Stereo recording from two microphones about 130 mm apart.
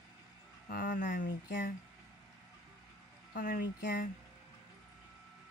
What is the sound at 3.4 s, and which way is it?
Speech, 90° left.